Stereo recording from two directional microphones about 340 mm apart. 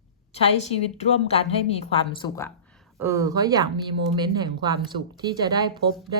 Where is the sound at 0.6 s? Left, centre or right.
Centre.